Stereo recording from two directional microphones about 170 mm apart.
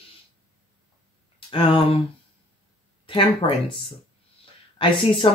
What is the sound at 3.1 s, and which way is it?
Speech, 30° left (ahead or behind).